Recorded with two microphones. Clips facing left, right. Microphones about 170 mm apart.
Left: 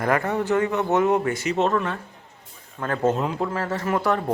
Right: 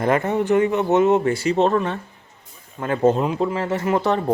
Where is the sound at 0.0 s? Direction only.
20° right (ahead or behind).